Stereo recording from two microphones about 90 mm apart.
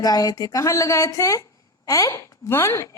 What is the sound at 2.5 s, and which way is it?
Speech, 30° left (ahead or behind).